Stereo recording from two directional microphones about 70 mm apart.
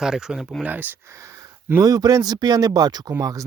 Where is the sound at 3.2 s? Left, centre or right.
Right.